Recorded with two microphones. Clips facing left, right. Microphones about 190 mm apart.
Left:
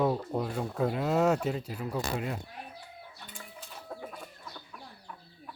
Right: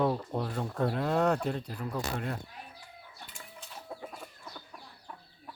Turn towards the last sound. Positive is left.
turn(degrees=-5)  # may be behind; listen again after turning